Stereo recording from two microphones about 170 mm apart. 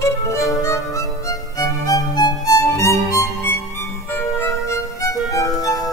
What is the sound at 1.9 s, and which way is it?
Music, 20° left (ahead or behind).